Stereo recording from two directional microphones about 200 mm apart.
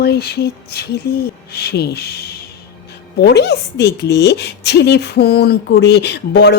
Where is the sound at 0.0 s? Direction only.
55° left (ahead or behind).